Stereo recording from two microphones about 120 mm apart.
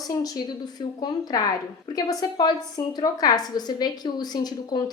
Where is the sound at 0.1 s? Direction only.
35° left (ahead or behind).